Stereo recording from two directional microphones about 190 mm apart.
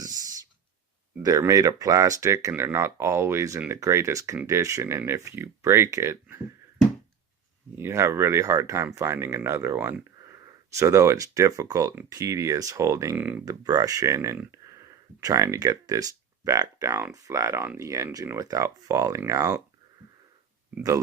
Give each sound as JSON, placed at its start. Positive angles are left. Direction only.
{"t": 1.2, "sound": "speech", "side_deg": -20}
{"t": 7.8, "sound": "speech", "side_deg": -15}